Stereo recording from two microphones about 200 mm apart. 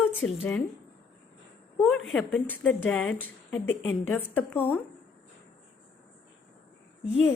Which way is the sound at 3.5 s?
80° left.